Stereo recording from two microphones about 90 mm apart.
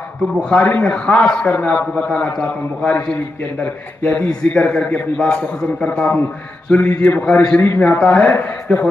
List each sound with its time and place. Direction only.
0.4 s a man's voice: 15° left (ahead or behind)
7.6 s a man's voice: 20° left (ahead or behind)